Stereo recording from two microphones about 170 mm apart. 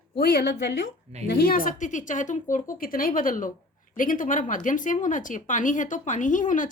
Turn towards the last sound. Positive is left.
turn(degrees=50)  # may be behind; listen again after turning